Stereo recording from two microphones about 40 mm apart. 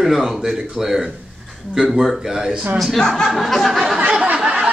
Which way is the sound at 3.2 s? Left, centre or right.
Centre.